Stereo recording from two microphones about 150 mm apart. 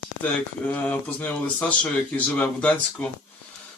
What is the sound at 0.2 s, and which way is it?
Speech, 10° left (ahead or behind).